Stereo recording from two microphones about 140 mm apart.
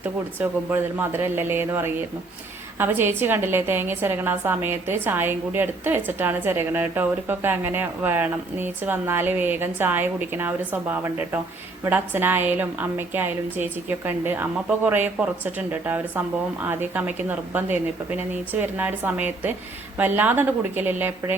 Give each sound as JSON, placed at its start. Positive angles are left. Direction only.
{"t": 0.3, "sound": "a woman's voice", "side_deg": -15}